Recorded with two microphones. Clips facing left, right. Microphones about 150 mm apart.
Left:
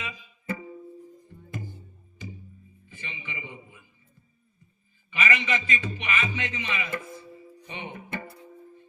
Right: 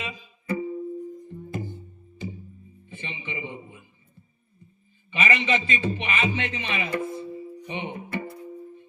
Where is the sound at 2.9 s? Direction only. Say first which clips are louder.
Right 5 dB; 25° right (ahead or behind).